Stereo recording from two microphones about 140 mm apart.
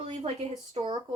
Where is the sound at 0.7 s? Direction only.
35° right (ahead or behind).